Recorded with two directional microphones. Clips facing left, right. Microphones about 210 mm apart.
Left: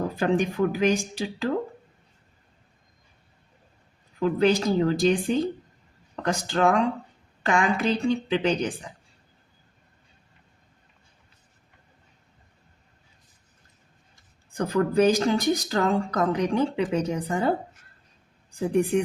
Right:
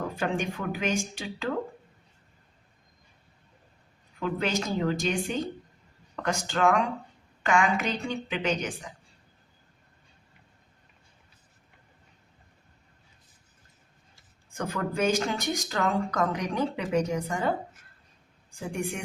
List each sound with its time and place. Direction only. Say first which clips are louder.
0.2 s speech: left 9 dB; 35° left (ahead or behind)
4.2 s speech: left 8 dB; 35° left (ahead or behind)
14.5 s speech: left 8 dB; 35° left (ahead or behind)
18.7 s speech: left 11 dB; 35° left (ahead or behind)